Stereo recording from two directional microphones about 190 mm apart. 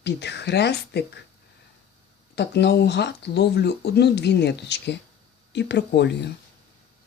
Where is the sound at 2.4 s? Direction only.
60° left (ahead or behind).